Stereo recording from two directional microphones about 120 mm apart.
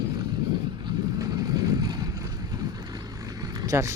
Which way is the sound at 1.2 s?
30° right (ahead or behind).